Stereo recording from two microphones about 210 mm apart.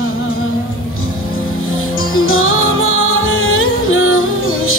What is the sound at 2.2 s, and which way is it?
Music, 75° left (ahead or behind).